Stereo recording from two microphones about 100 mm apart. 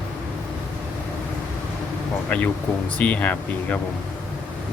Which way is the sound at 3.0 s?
15° left (ahead or behind).